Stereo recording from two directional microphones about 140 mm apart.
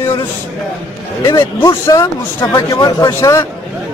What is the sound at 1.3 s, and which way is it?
Speech, 20° left (ahead or behind).